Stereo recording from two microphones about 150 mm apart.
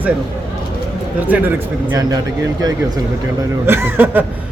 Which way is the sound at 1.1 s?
10° right (ahead or behind).